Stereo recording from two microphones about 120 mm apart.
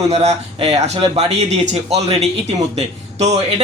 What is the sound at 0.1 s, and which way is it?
Speech, 65° right (ahead or behind).